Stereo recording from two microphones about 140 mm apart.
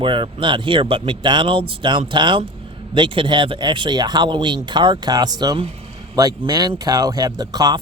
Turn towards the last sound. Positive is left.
turn(degrees=-30)  # may be behind; listen again after turning